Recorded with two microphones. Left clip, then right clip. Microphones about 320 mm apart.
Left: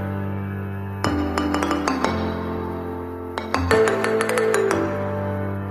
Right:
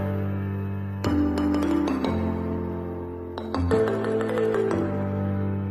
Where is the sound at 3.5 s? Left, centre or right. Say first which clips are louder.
Left 5 dB; left.